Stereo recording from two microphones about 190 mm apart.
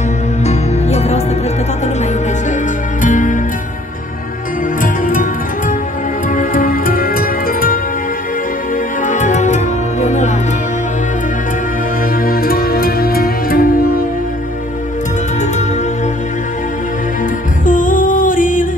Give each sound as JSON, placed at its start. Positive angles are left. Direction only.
{"t": 0.5, "sound": "music", "side_deg": 35}
{"t": 3.0, "sound": "music", "side_deg": 40}
{"t": 4.8, "sound": "music", "side_deg": 45}
{"t": 9.0, "sound": "music", "side_deg": 40}
{"t": 12.2, "sound": "music", "side_deg": 50}
{"t": 17.6, "sound": "music", "side_deg": 45}